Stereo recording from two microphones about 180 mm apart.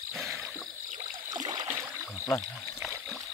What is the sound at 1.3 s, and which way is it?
Boat, 25° right (ahead or behind).